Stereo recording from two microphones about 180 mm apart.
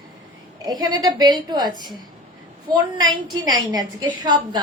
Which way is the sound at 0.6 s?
20° right (ahead or behind).